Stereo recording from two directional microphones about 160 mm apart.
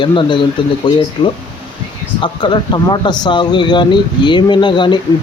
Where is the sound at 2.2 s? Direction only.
30° left (ahead or behind).